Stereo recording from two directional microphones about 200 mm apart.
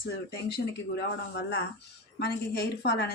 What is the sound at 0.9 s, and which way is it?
Speech, 55° left (ahead or behind).